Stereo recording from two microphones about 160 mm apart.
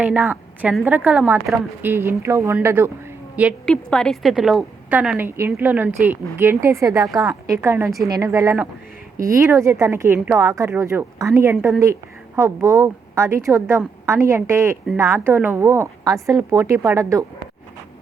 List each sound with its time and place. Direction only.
0.1 s a woman's voice: 10° right (ahead or behind)
3.7 s a woman's voice: 5° left (ahead or behind); by 7.1 s 20° right (ahead or behind)
7.1 s a woman's voice: centre (ahead or behind)
7.4 s a woman's voice: 15° right (ahead or behind)